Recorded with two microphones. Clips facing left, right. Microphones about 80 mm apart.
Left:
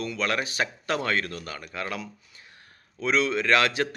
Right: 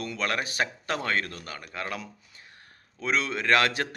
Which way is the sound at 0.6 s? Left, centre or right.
Right.